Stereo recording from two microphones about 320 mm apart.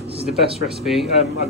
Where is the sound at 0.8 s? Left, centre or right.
Centre.